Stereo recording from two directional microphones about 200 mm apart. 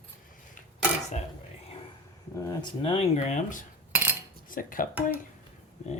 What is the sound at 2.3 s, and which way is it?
Speech, 20° left (ahead or behind).